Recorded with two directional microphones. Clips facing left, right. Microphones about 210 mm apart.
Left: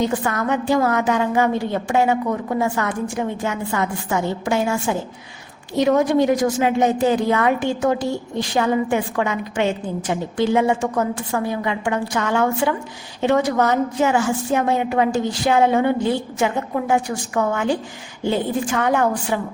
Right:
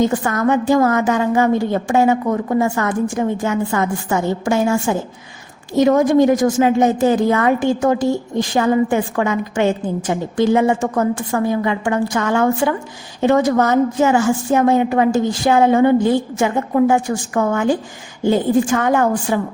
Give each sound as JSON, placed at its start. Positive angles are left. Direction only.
{"t": 0.0, "sound": "a woman's voice", "side_deg": -45}
{"t": 16.9, "sound": "a woman's voice", "side_deg": -45}